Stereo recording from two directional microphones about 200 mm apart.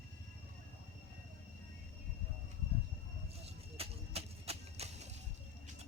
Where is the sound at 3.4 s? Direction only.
30° right (ahead or behind).